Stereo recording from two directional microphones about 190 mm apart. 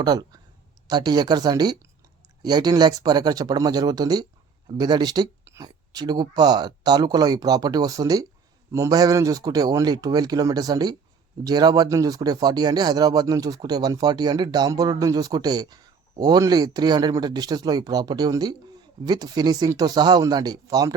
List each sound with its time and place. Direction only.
0.0 s speech: 20° right (ahead or behind)